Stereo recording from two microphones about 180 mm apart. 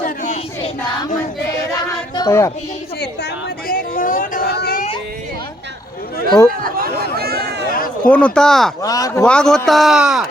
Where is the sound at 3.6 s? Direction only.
50° left (ahead or behind).